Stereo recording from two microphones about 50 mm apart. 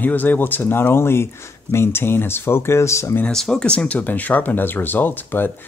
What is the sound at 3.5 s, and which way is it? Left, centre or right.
Speech, left.